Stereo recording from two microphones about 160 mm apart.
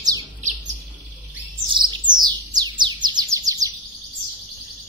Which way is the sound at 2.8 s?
30° right (ahead or behind).